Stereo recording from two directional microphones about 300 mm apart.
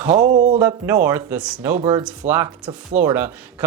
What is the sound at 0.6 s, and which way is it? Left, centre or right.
Speech, centre.